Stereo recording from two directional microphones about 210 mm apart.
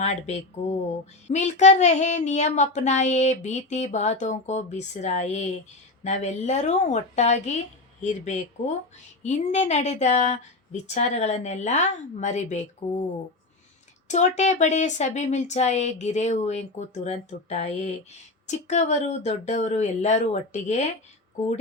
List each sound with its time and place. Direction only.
0.0 s speech: 30° left (ahead or behind)
14.1 s speech: 35° left (ahead or behind)